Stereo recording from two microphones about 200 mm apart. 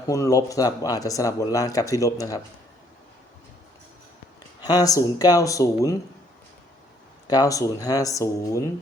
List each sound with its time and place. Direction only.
0.1 s speech: 15° left (ahead or behind)
4.6 s speech: 20° left (ahead or behind)
7.3 s speech: 20° left (ahead or behind)